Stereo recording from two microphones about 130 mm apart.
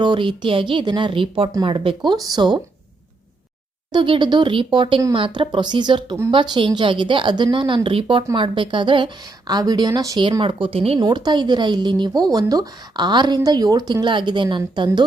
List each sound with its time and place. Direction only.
0.0 s speech: 40° right (ahead or behind)
3.9 s speech: 40° right (ahead or behind)
10.4 s speech: 45° right (ahead or behind)
11.0 s speech: 35° right (ahead or behind)